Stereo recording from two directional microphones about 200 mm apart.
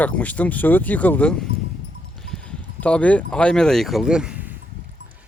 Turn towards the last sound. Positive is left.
turn(degrees=-5)  # may be behind; listen again after turning